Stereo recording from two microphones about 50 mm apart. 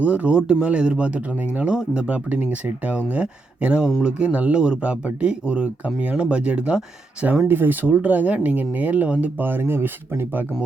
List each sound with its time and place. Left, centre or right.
0.0 s speech: right
7.4 s speech: right
9.0 s speech: right
9.4 s speech: right